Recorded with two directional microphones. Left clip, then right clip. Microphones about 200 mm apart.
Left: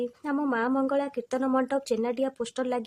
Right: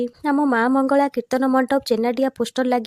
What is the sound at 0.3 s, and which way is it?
Speech, 35° right (ahead or behind).